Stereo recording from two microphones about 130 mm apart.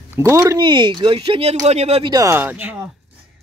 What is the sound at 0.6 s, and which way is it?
Speech, 40° right (ahead or behind).